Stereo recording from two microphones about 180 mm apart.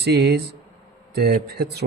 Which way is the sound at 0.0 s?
65° right (ahead or behind).